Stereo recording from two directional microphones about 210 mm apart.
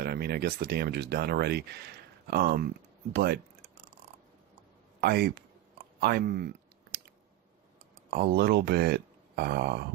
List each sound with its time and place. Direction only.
0.0 s speech: 50° right (ahead or behind)
4.9 s a man's voice: 50° right (ahead or behind)
8.1 s speech: 45° right (ahead or behind)